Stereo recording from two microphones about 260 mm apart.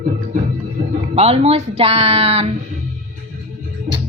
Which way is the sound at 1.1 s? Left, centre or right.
Right.